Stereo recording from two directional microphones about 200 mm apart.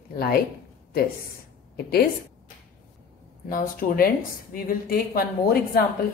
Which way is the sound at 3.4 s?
45° left (ahead or behind).